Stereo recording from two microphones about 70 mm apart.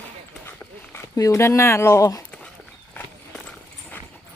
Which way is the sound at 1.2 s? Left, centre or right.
Left.